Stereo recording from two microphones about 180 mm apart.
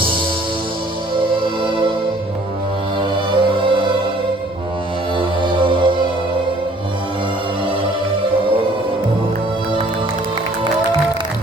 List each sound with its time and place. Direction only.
3.0 s music: 30° right (ahead or behind)
5.1 s music: 30° right (ahead or behind)